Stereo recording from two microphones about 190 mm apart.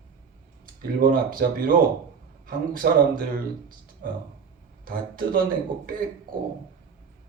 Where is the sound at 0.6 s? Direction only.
50° right (ahead or behind).